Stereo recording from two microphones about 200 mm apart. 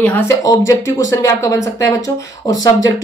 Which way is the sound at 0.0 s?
10° left (ahead or behind).